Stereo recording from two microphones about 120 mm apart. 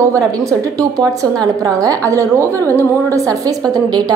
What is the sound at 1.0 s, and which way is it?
A woman's voice, 30° right (ahead or behind).